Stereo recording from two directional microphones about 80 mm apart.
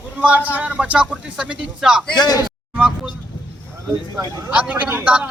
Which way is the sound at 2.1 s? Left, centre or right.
Left.